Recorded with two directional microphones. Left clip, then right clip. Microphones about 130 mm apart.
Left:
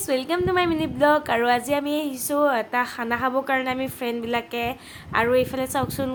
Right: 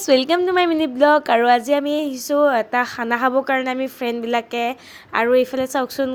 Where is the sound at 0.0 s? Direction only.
65° right (ahead or behind).